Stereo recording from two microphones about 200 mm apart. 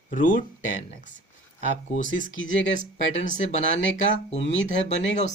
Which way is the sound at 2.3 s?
70° left (ahead or behind).